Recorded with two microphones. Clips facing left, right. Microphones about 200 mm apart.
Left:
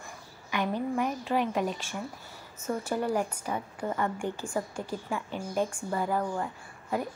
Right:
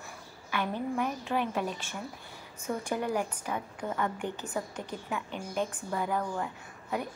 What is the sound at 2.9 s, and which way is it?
Speech, 15° right (ahead or behind).